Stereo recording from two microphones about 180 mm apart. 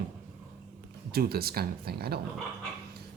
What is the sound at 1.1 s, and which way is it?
Speech, 60° right (ahead or behind).